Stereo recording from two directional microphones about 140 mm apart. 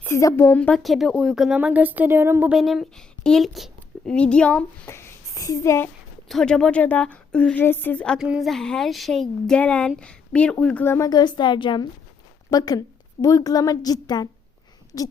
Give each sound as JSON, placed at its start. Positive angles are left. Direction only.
{"t": 0.0, "sound": "speech", "side_deg": 20}
{"t": 0.8, "sound": "speech", "side_deg": 0}
{"t": 2.5, "sound": "speech", "side_deg": -5}
{"t": 4.9, "sound": "a child's voice", "side_deg": 20}
{"t": 6.2, "sound": "a woman's voice", "side_deg": 5}